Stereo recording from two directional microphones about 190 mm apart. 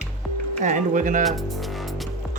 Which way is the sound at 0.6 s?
40° right (ahead or behind).